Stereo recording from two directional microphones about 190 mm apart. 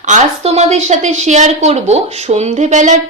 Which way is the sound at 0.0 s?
35° right (ahead or behind).